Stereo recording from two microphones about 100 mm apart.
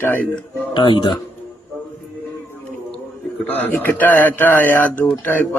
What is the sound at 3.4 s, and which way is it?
A man's voice, 15° left (ahead or behind).